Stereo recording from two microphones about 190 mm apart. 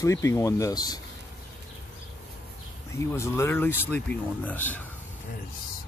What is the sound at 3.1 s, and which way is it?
Speech, 15° left (ahead or behind).